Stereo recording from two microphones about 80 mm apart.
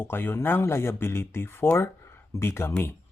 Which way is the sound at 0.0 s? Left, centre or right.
Left.